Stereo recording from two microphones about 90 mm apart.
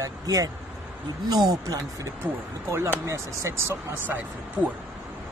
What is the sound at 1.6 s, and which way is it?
Speech, 45° right (ahead or behind).